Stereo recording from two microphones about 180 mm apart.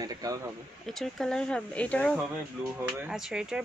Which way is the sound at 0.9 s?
Centre (ahead or behind).